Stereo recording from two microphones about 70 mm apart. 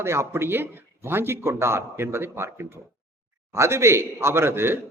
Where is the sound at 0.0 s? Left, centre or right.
Right.